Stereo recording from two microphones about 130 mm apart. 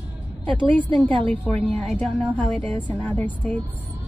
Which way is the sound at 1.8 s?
5° left (ahead or behind).